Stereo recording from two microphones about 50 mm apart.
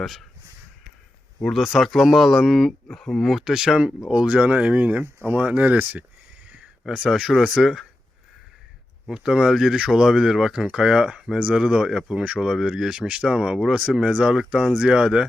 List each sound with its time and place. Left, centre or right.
0.0 s speech: centre
1.5 s speech: centre
2.9 s speech: centre
3.2 s speech: centre; by 6.1 s right
6.8 s speech: centre
9.0 s speech: centre
12.5 s speech: centre
13.0 s speech: right
14.3 s speech: centre